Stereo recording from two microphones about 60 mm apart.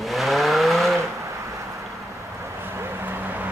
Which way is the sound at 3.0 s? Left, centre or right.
Right.